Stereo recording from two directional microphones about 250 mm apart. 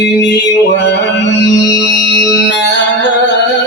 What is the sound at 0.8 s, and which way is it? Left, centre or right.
Music, left.